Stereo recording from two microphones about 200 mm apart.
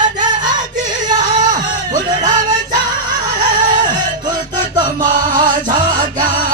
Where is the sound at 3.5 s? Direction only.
40° right (ahead or behind).